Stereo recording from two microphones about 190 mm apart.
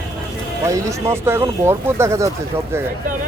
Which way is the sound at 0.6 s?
15° right (ahead or behind).